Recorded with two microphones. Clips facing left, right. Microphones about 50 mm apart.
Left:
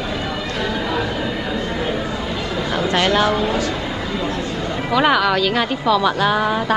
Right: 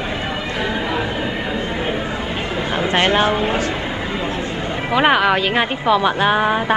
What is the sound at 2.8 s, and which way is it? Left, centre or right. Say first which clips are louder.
Speech: right 1 dB; right.